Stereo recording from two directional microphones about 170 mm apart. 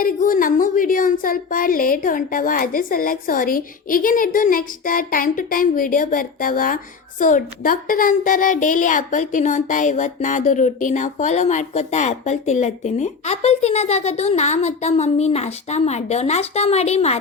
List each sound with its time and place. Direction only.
0.0 s a woman's voice: 50° left (ahead or behind)